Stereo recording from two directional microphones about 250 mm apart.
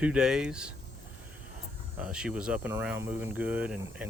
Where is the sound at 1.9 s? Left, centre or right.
Centre.